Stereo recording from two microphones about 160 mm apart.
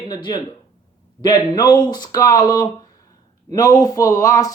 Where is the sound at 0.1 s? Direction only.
25° left (ahead or behind).